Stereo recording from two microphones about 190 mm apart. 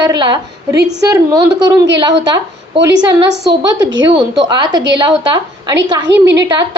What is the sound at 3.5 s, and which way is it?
A woman's voice, 25° right (ahead or behind).